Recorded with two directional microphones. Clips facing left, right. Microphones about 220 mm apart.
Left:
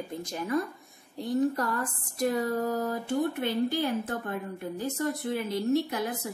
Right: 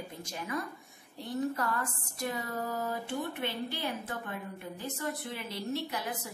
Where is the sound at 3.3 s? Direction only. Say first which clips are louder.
Left 8 dB; 40° left (ahead or behind).